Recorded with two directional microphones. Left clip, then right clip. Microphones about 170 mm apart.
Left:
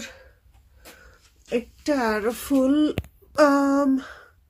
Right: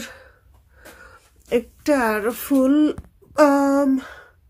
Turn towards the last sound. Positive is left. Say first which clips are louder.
# right 3 dB
turn(degrees=-15)  # may be behind; listen again after turning